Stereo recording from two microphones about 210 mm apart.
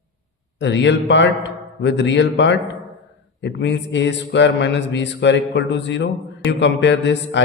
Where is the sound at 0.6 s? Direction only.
60° left (ahead or behind).